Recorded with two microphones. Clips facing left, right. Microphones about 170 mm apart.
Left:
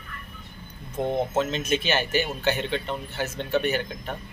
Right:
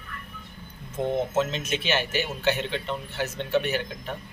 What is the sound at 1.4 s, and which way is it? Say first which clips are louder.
Speech: left 2 dB; centre (ahead or behind).